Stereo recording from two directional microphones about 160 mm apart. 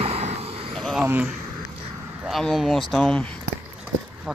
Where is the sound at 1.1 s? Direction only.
10° right (ahead or behind).